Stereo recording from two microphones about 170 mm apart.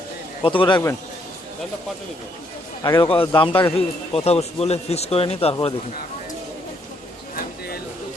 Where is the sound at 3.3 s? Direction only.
30° left (ahead or behind).